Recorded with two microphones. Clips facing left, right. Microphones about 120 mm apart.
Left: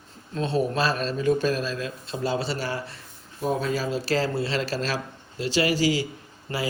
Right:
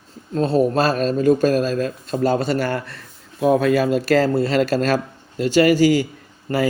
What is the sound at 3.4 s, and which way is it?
Speech, 70° right (ahead or behind).